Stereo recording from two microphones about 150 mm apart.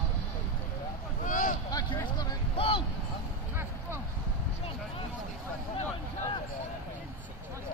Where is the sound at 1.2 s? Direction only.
65° left (ahead or behind).